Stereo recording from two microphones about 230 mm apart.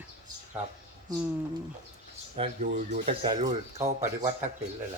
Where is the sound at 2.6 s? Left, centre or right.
Right.